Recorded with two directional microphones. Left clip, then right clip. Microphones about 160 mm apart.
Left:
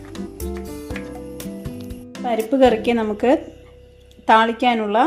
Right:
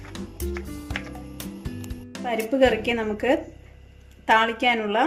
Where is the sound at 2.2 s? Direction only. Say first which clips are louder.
Left 5 dB; 60° left (ahead or behind).